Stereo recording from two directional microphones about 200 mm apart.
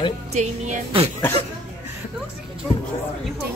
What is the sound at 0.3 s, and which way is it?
Music, 35° right (ahead or behind).